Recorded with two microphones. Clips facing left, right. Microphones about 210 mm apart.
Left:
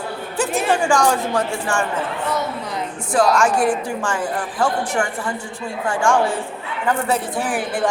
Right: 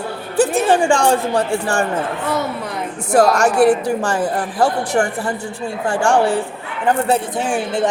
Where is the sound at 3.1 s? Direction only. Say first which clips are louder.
Right 4 dB; 40° right (ahead or behind).